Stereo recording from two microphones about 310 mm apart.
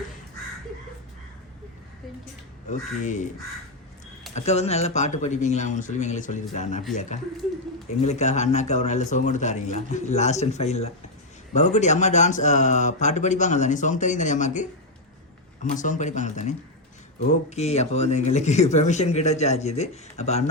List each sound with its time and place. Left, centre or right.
2.6 s speech: left
4.4 s speech: left
15.7 s speech: left